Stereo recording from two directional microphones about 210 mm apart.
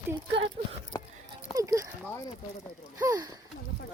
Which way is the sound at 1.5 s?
15° right (ahead or behind).